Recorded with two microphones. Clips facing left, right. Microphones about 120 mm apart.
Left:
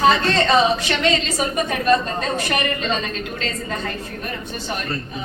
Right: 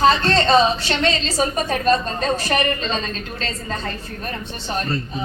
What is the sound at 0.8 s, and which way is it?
A woman's voice, 35° right (ahead or behind).